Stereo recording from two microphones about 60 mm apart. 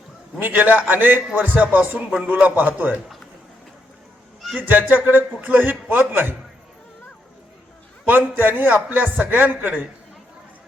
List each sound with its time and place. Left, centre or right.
0.3 s a man's voice: right
4.6 s a man's voice: right
8.0 s a man's voice: right